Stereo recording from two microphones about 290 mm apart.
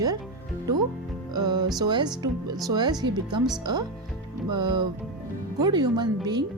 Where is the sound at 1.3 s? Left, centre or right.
Centre.